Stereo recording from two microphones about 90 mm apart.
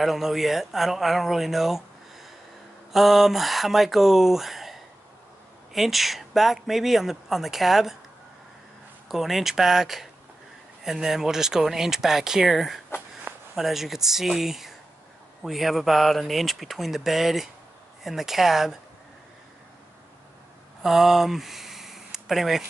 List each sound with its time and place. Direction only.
0.0 s speech: centre (ahead or behind)
2.9 s speech: centre (ahead or behind)
9.1 s speech: centre (ahead or behind)
13.3 s a sound: 25° right (ahead or behind)
13.6 s speech: 5° right (ahead or behind)
20.8 s speech: 5° right (ahead or behind)